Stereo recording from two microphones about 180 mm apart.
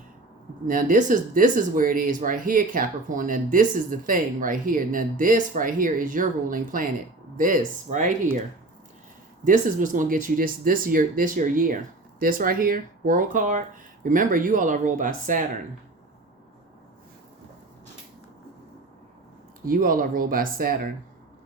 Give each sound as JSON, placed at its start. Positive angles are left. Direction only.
{"t": 0.7, "sound": "speech", "side_deg": -50}
{"t": 9.4, "sound": "speech", "side_deg": -45}
{"t": 19.6, "sound": "speech", "side_deg": -50}